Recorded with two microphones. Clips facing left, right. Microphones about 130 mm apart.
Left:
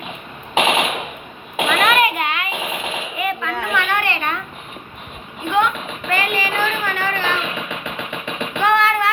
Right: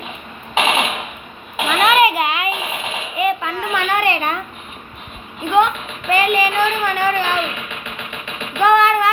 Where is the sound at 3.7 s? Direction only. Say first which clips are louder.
Right 4 dB; 15° right (ahead or behind).